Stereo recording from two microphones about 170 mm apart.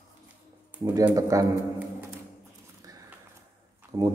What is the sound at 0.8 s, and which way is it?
Speech, 20° right (ahead or behind).